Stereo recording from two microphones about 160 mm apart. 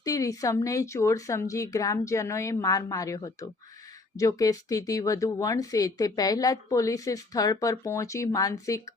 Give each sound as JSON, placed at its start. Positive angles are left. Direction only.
{"t": 0.0, "sound": "speech", "side_deg": 20}